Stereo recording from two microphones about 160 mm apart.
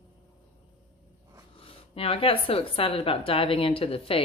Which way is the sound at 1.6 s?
35° left (ahead or behind).